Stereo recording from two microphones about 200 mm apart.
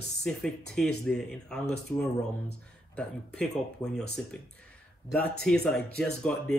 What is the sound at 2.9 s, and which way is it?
Speech, 5° left (ahead or behind).